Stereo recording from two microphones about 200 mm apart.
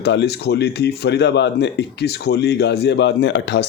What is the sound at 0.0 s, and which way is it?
Speech, 55° left (ahead or behind).